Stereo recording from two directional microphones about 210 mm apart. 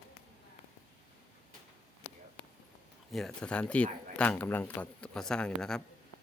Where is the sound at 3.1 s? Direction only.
Centre (ahead or behind).